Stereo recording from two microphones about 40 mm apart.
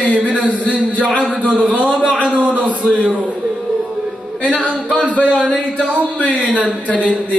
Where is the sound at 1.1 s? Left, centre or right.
Right.